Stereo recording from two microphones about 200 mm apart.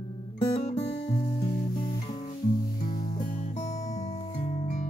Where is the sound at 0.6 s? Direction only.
30° left (ahead or behind).